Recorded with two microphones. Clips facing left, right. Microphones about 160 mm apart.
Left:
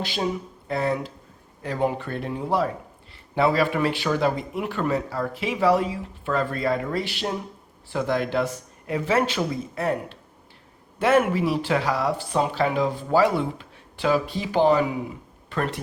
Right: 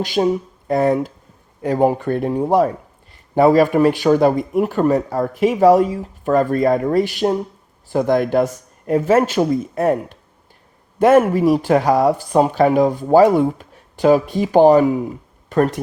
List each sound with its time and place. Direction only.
0.0 s speech: 45° right (ahead or behind)